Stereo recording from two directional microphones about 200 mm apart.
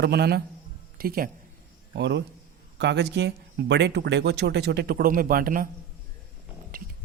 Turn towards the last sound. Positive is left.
turn(degrees=-45)  # may be behind; listen again after turning